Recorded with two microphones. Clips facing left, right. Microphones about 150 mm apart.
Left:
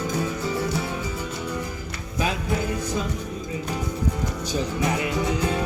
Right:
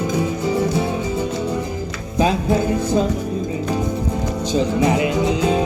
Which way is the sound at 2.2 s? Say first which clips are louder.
Right 8 dB; 30° right (ahead or behind).